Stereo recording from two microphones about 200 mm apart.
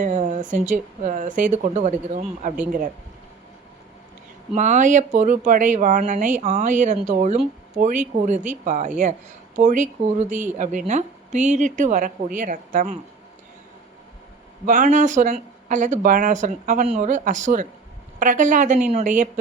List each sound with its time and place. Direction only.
0.0 s a sound: 35° right (ahead or behind)
0.5 s speech: 40° right (ahead or behind)
4.5 s speech: 40° right (ahead or behind)
14.7 s speech: 40° right (ahead or behind)